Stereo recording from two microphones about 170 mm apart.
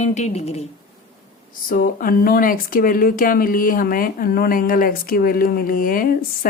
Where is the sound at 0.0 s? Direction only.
45° left (ahead or behind).